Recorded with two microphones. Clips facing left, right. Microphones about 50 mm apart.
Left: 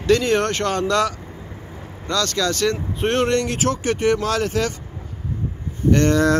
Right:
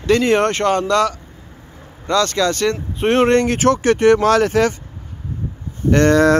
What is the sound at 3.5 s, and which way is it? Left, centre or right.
Speech, right.